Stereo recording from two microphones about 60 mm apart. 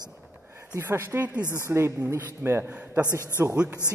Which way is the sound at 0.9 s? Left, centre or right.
Right.